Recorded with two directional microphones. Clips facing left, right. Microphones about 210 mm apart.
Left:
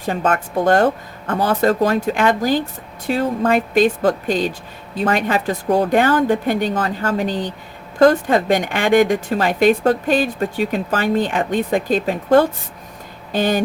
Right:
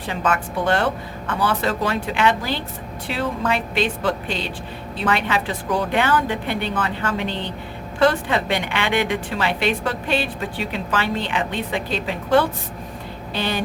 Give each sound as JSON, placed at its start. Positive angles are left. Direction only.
{"t": 0.0, "sound": "a woman's voice", "side_deg": 45}